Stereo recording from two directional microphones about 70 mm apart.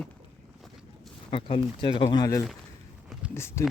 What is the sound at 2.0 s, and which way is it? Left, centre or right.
Speech, left.